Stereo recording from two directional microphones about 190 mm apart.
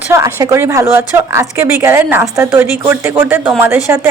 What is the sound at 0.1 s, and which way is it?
Speech, 15° right (ahead or behind).